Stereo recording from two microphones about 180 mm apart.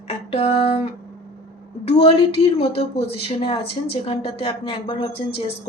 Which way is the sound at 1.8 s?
35° left (ahead or behind).